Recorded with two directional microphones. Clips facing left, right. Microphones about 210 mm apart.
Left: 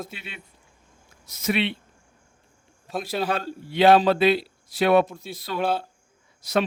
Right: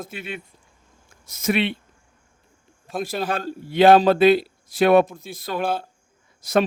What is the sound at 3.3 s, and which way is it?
A man's voice, 45° right (ahead or behind).